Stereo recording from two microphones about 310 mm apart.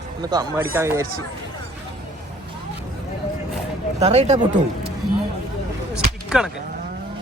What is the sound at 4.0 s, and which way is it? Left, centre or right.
Speech, centre.